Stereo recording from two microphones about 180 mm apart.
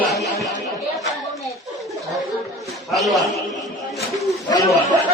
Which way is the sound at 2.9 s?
Centre (ahead or behind).